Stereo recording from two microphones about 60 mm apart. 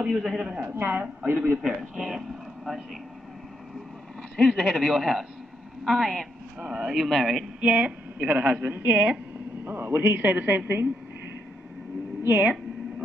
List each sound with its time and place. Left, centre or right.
0.0 s a man's voice: centre
0.7 s a woman's voice: right
1.2 s speech: right
1.7 s speech: centre
4.5 s speech: centre
6.7 s speech: centre
7.6 s a woman's voice: right
9.9 s a woman's voice: centre